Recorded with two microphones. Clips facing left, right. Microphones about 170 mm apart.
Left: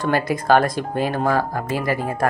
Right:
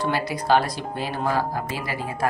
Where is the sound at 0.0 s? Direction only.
50° left (ahead or behind).